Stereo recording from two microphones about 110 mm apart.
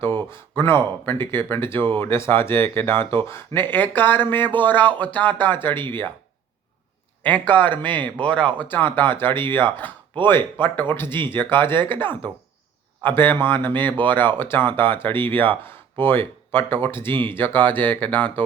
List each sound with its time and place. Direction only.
0.0 s speech: 20° left (ahead or behind)
7.2 s speech: 15° left (ahead or behind)
13.0 s speech: 15° left (ahead or behind)